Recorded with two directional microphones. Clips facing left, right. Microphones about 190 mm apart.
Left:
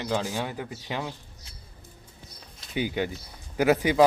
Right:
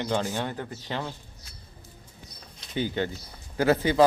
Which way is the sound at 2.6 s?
10° left (ahead or behind).